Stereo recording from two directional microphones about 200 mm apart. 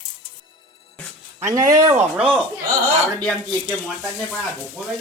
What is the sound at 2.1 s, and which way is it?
Speech, centre (ahead or behind).